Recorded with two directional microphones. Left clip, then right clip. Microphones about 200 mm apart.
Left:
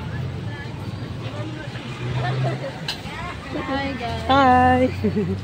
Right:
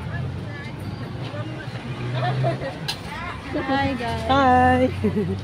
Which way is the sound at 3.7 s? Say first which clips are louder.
Right 3 dB; 50° right (ahead or behind).